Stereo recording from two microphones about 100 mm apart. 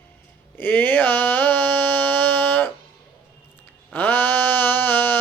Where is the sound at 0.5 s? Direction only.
20° left (ahead or behind).